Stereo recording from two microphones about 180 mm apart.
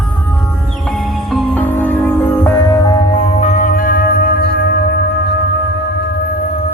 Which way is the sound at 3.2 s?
35° left (ahead or behind).